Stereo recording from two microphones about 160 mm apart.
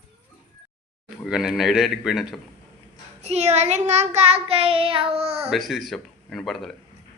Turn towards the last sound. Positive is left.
turn(degrees=0)  # may be behind; listen again after turning